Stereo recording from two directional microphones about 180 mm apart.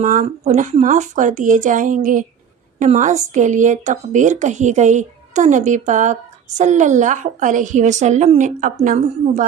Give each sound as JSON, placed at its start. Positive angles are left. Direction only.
{"t": 0.0, "sound": "speech", "side_deg": -45}